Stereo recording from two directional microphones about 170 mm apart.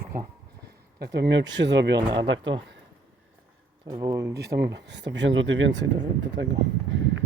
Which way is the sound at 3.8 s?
20° right (ahead or behind).